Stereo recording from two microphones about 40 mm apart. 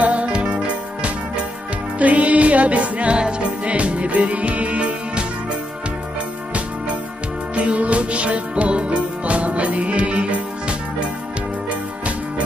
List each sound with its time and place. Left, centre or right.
0.0 s music: right
7.5 s music: right